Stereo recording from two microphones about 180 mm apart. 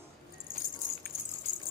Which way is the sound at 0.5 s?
50° left (ahead or behind).